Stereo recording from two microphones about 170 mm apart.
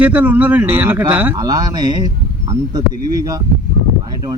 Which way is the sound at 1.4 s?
20° right (ahead or behind).